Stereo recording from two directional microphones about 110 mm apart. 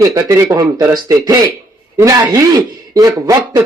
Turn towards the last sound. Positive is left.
turn(degrees=-35)  # may be behind; listen again after turning